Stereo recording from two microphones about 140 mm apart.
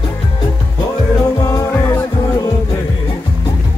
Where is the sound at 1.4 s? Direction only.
25° left (ahead or behind).